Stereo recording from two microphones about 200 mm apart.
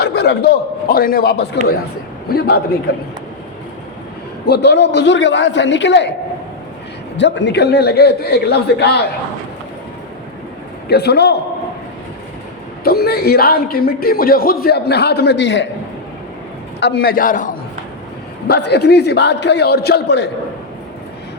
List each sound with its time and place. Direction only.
0.0 s a man's voice: 55° left (ahead or behind)
4.4 s a man's voice: 55° left (ahead or behind)
7.2 s a man's voice: 60° left (ahead or behind)
10.8 s a man's voice: 55° left (ahead or behind)
12.8 s a man's voice: 50° left (ahead or behind)
16.8 s a man's voice: 50° left (ahead or behind)
18.4 s a man's voice: 55° left (ahead or behind)